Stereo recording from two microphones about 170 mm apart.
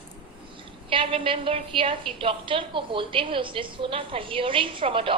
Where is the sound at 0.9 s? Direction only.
30° right (ahead or behind).